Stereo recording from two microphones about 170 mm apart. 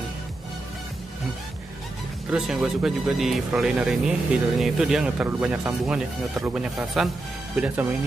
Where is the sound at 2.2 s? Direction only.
5° right (ahead or behind).